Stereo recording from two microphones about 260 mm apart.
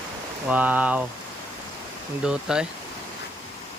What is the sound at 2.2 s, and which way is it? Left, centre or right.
Speech, centre.